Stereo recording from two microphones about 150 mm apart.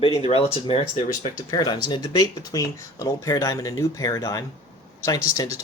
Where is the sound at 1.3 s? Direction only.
25° left (ahead or behind).